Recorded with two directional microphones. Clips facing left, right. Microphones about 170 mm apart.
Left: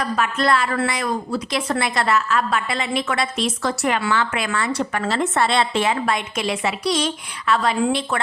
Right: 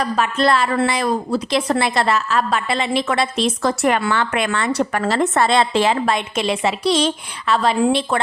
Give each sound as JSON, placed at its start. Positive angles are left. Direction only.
{"t": 0.2, "sound": "a woman's voice", "side_deg": -30}
{"t": 3.8, "sound": "a woman's voice", "side_deg": -50}